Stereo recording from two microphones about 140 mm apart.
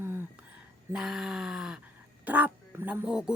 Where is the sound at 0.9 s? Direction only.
Centre (ahead or behind).